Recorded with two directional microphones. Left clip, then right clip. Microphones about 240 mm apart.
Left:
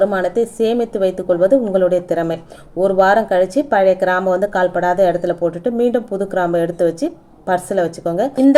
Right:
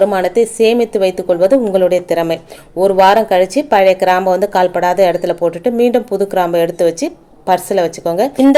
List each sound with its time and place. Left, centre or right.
0.0 s speech: centre